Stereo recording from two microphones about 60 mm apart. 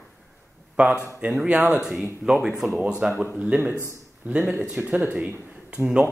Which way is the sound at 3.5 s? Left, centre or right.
Right.